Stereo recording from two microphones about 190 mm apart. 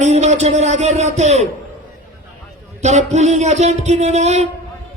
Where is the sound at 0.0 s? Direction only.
35° right (ahead or behind).